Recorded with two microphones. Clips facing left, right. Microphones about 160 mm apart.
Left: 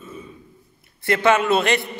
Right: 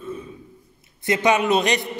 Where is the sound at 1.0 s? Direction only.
15° right (ahead or behind).